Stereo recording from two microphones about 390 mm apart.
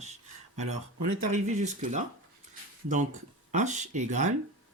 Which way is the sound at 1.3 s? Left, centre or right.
Centre.